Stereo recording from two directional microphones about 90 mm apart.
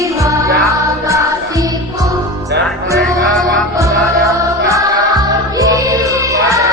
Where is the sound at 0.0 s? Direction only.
40° right (ahead or behind).